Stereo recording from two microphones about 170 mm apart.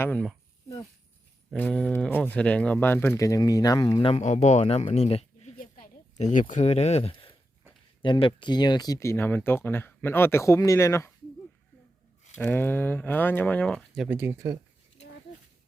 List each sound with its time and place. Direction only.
0.0 s speech: 10° left (ahead or behind)
1.5 s speech: 5° left (ahead or behind)
4.0 s speech: 40° left (ahead or behind)
5.5 s a sound: 55° left (ahead or behind); by 7.3 s 35° left (ahead or behind)
8.0 s speech: 30° left (ahead or behind)
12.4 s speech: 10° left (ahead or behind)
14.1 s speech: 10° right (ahead or behind)